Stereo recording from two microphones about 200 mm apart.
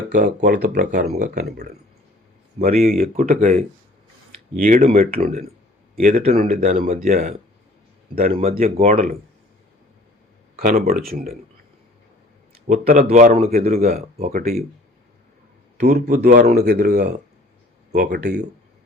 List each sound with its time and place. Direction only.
0.1 s speech: 35° right (ahead or behind)
0.4 s speech: 50° right (ahead or behind)
2.8 s speech: 45° right (ahead or behind)
8.3 s speech: 30° right (ahead or behind)
10.6 s speech: 40° right (ahead or behind)
12.6 s speech: 45° right (ahead or behind)
14.2 s speech: 35° right (ahead or behind)
15.8 s speech: 50° right (ahead or behind)
18.1 s speech: 55° right (ahead or behind)